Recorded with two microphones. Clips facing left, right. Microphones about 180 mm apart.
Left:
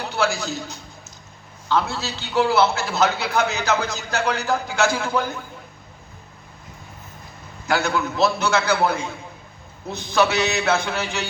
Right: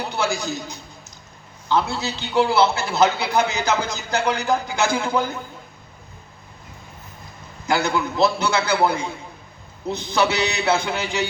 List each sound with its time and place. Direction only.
0.2 s a man's voice: 15° right (ahead or behind)
7.7 s a man's voice: 15° right (ahead or behind)